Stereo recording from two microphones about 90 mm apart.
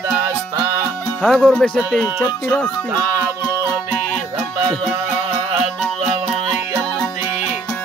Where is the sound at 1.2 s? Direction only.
10° left (ahead or behind).